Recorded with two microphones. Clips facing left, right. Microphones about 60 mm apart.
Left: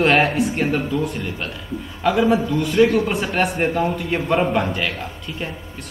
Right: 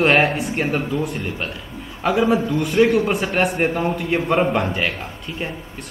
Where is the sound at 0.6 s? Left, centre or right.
Centre.